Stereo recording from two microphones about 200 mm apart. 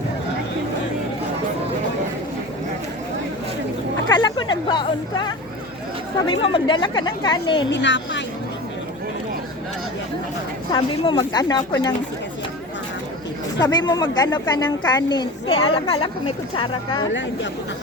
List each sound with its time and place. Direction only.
4.1 s a sound: 20° left (ahead or behind)
6.4 s speech: 25° left (ahead or behind)
7.7 s speech: 65° left (ahead or behind)
10.7 s speech: 25° left (ahead or behind)
13.6 s speech: 20° left (ahead or behind)